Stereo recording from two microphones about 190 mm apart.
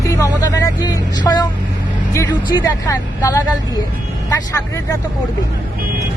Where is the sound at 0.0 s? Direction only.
15° left (ahead or behind).